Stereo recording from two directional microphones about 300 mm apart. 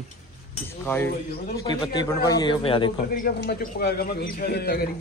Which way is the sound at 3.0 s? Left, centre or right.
Left.